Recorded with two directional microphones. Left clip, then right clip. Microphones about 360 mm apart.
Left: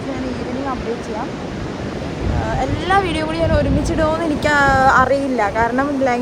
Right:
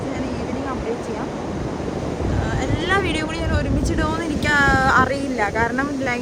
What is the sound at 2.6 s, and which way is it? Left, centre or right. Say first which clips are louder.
Speech: left 4 dB; centre.